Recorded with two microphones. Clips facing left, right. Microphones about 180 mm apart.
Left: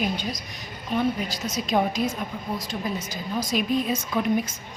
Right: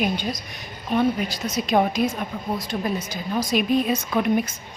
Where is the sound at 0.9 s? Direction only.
60° right (ahead or behind).